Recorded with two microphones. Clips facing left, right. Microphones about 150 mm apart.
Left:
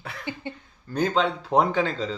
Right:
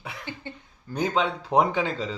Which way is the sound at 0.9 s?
10° right (ahead or behind).